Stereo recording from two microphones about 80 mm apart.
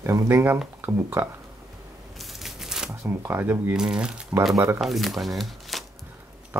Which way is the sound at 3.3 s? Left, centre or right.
Right.